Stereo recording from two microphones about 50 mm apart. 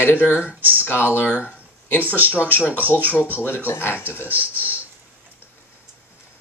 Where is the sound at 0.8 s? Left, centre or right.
Left.